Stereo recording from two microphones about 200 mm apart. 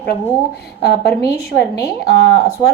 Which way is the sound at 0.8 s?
55° left (ahead or behind).